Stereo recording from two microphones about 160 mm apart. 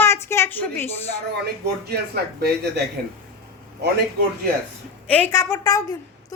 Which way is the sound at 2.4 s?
90° right.